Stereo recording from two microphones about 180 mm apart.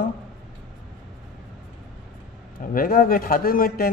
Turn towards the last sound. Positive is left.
turn(degrees=55)  # may be behind; listen again after turning